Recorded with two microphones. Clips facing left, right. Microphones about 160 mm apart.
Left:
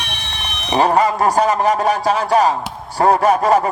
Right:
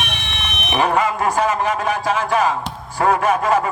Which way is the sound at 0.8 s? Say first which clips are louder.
Left 3 dB; 35° left (ahead or behind).